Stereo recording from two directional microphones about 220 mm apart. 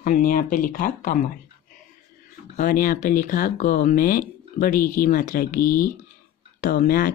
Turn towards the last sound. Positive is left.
turn(degrees=40)  # may be behind; listen again after turning